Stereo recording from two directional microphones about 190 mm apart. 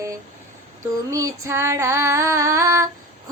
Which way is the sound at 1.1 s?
15° right (ahead or behind).